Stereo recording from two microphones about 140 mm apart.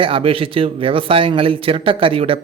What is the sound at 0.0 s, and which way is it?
Speech, 40° right (ahead or behind).